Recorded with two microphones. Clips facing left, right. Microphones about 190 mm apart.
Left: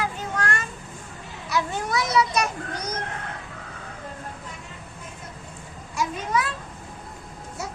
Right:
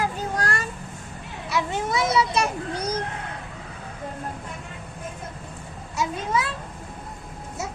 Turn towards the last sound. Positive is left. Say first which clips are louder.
# even
turn(degrees=-25)  # may be behind; listen again after turning